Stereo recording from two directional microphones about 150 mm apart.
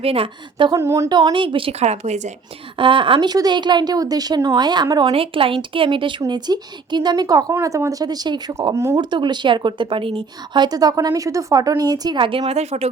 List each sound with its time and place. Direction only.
0.0 s a woman's voice: 40° right (ahead or behind)
0.7 s a woman's voice: 20° right (ahead or behind); by 2.3 s 50° right (ahead or behind)
2.7 s a woman's voice: 35° right (ahead or behind)
5.1 s a woman's voice: 40° right (ahead or behind); by 9.0 s 20° right (ahead or behind)
9.0 s a woman's voice: 30° right (ahead or behind)